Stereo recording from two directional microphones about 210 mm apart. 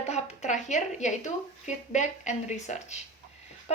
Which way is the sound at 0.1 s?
35° left (ahead or behind).